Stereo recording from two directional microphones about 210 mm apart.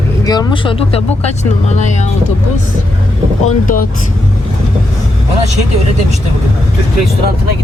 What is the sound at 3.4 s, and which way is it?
Speech, 40° left (ahead or behind).